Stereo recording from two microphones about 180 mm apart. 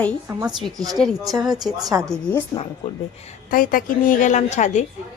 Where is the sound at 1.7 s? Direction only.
20° right (ahead or behind).